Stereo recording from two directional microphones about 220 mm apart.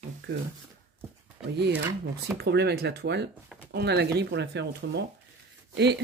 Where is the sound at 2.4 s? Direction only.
50° right (ahead or behind).